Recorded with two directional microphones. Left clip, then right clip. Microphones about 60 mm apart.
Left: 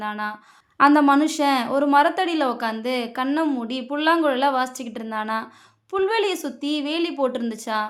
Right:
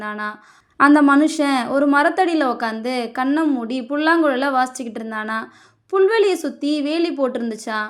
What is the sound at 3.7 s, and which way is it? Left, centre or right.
A woman's voice, right.